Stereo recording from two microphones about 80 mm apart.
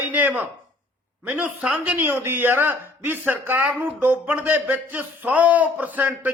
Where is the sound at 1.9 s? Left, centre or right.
Right.